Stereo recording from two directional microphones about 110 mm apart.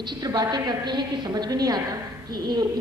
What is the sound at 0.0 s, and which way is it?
A woman's voice, 40° right (ahead or behind).